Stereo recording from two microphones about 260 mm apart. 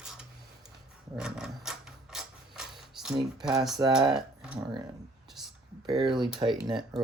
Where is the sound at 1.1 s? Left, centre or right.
Centre.